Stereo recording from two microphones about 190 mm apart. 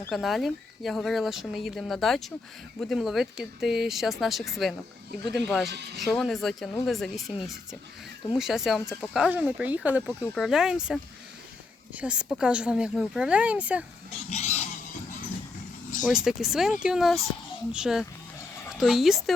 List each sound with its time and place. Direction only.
0.1 s speech: centre (ahead or behind)
14.3 s vehicle: 35° left (ahead or behind)
16.0 s a woman's voice: centre (ahead or behind)